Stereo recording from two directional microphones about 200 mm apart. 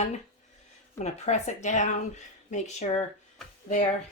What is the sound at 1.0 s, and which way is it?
Speech, 35° left (ahead or behind).